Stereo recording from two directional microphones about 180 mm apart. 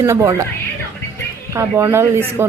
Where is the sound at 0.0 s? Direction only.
15° right (ahead or behind).